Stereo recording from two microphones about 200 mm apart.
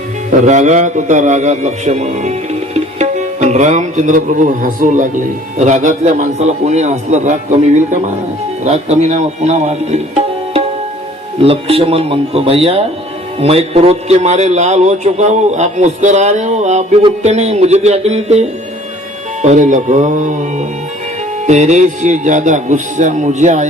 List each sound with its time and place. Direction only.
0.3 s a man's voice: 35° right (ahead or behind)
8.6 s a man's voice: 35° right (ahead or behind)